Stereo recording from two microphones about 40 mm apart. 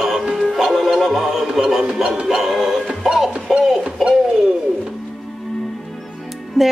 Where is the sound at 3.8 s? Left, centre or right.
Centre.